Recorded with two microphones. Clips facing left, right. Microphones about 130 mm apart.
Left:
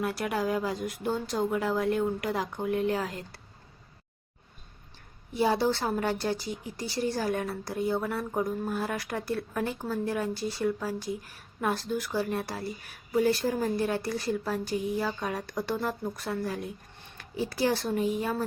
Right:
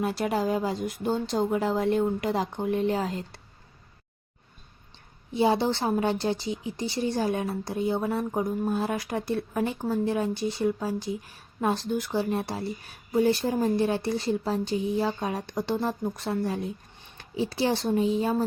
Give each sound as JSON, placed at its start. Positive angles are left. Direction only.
{"t": 0.0, "sound": "a woman's voice", "side_deg": -25}
{"t": 5.3, "sound": "a woman's voice", "side_deg": -25}